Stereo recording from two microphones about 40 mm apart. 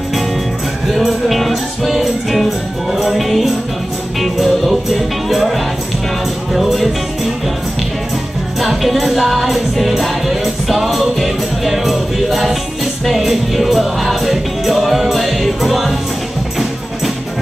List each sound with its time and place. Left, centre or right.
0.8 s music: centre
8.5 s music: centre